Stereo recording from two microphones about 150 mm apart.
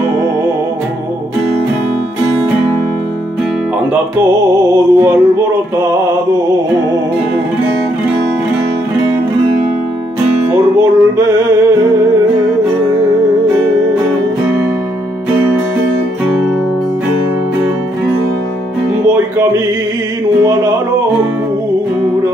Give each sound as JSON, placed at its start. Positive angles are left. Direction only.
{"t": 3.9, "sound": "music", "side_deg": -15}
{"t": 10.5, "sound": "music", "side_deg": -20}
{"t": 20.4, "sound": "a sound", "side_deg": -20}